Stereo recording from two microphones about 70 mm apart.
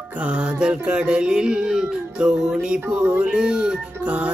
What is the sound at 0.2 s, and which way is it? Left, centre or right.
Music, centre.